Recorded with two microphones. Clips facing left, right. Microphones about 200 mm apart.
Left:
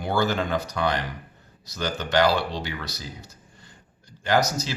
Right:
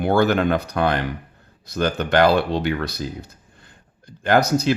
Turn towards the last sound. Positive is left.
turn(degrees=-60)  # may be behind; listen again after turning